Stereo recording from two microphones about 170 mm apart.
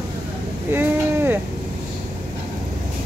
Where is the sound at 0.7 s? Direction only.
15° right (ahead or behind).